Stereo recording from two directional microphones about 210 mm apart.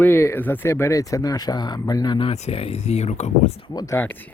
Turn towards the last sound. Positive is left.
turn(degrees=10)  # may be behind; listen again after turning